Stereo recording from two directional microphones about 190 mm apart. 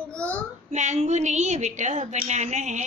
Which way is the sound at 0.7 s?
35° right (ahead or behind).